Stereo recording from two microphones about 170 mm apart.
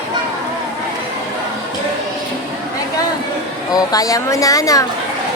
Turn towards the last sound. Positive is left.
turn(degrees=20)  # may be behind; listen again after turning